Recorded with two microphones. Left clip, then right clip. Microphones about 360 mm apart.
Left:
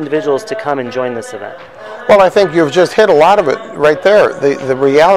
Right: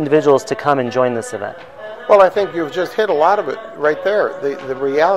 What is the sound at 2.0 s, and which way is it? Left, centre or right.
A man's voice, left.